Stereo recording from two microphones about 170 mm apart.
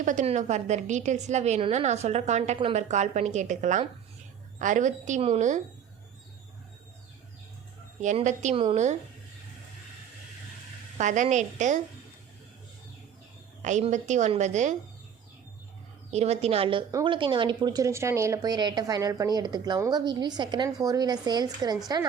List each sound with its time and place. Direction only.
0.0 s a woman's voice: 45° right (ahead or behind)
8.0 s a woman's voice: 45° right (ahead or behind)
10.9 s a woman's voice: 45° right (ahead or behind)
13.6 s a woman's voice: 45° right (ahead or behind)
16.1 s a woman's voice: 40° right (ahead or behind)